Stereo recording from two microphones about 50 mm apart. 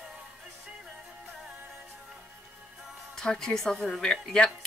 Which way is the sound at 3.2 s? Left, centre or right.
Centre.